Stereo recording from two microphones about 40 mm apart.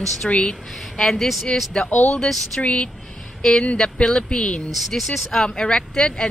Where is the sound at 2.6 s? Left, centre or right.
Left.